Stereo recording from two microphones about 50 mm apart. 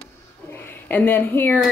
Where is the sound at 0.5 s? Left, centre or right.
Left.